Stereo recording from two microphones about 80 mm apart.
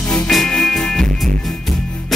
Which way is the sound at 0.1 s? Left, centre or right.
Centre.